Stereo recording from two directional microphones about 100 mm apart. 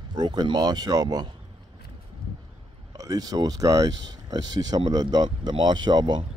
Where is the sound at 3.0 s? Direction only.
40° right (ahead or behind).